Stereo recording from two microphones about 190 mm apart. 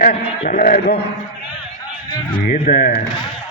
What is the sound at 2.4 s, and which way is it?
Speech, 50° left (ahead or behind).